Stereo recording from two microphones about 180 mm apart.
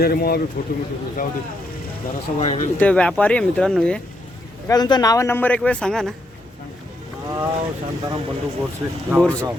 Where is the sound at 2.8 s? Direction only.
5° left (ahead or behind).